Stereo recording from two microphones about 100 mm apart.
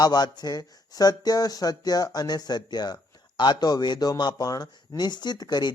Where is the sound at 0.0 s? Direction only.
45° left (ahead or behind).